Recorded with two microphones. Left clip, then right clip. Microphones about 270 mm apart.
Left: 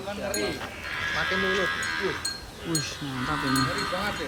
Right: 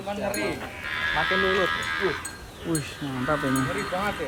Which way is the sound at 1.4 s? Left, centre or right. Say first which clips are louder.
Right 2 dB; centre.